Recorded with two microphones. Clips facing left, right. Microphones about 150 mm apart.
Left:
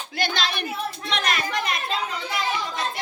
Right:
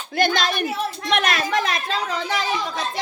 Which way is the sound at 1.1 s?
70° right (ahead or behind).